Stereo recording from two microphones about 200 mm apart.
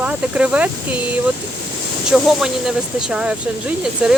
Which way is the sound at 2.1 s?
Centre (ahead or behind).